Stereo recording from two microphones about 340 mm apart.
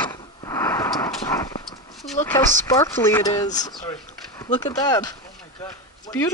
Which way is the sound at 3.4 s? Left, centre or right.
Centre.